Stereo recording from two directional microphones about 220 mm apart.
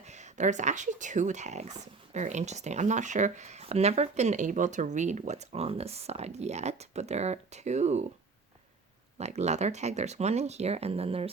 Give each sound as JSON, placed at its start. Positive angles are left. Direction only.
{"t": 0.0, "sound": "speech", "side_deg": -30}
{"t": 9.1, "sound": "speech", "side_deg": -30}